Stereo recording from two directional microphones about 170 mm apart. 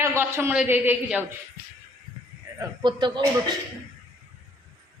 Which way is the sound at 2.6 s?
25° right (ahead or behind).